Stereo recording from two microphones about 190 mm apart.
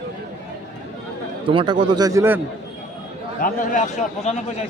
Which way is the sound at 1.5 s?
25° right (ahead or behind).